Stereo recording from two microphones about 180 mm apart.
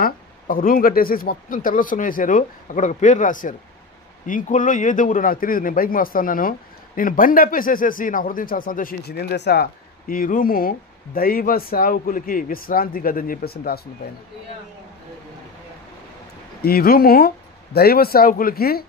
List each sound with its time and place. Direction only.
0.0 s speech: 50° left (ahead or behind)
16.6 s speech: 55° left (ahead or behind)